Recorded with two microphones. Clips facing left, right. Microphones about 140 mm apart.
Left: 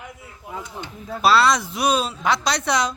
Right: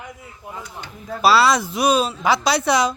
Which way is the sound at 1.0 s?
5° right (ahead or behind).